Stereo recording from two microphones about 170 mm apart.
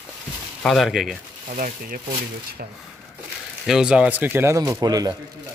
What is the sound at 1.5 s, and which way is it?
Speech, 55° right (ahead or behind).